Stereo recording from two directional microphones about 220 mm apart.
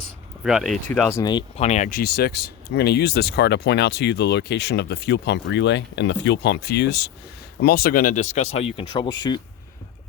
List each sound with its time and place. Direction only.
0.0 s speech: centre (ahead or behind)
1.2 s speech: 20° left (ahead or behind)